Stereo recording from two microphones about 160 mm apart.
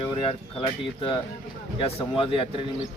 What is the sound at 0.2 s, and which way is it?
Speech, 35° left (ahead or behind).